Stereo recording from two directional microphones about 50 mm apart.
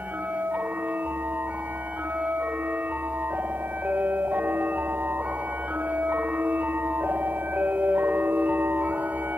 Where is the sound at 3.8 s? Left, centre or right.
Right.